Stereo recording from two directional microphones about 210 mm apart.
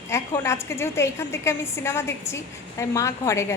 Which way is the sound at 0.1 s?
10° left (ahead or behind).